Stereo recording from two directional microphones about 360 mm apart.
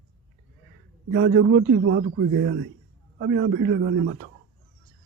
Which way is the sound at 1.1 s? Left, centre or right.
Right.